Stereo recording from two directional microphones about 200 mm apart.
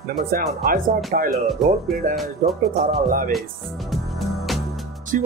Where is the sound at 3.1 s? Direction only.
45° right (ahead or behind).